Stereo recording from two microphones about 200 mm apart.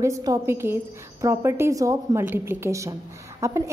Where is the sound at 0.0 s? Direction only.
15° right (ahead or behind).